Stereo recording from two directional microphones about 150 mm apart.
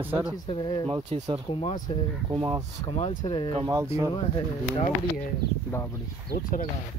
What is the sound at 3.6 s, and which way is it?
Speech, 20° right (ahead or behind).